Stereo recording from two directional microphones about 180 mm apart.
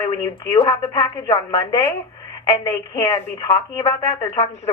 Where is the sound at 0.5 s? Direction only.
20° left (ahead or behind).